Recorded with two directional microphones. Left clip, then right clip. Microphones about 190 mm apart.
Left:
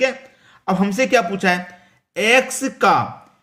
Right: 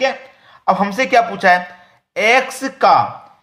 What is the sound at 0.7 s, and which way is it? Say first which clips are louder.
A man's voice: right 3 dB; 25° left (ahead or behind).